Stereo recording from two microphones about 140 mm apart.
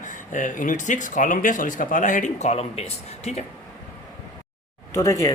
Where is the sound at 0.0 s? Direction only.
65° left (ahead or behind); by 3.4 s 50° left (ahead or behind).